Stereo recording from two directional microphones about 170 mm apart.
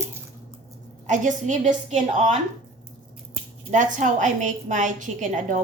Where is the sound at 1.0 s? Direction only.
45° right (ahead or behind).